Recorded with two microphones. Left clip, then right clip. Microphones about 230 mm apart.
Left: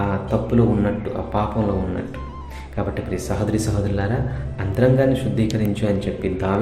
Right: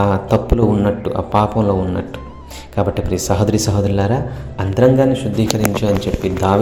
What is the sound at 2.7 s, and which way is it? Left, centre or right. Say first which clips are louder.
Speech: right 7 dB; right.